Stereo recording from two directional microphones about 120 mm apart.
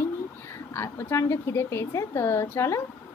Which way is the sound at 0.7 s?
20° left (ahead or behind).